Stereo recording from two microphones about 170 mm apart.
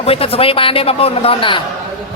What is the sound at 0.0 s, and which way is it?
Speech, 35° left (ahead or behind).